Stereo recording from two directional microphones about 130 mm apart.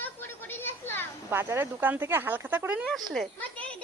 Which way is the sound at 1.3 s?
15° right (ahead or behind).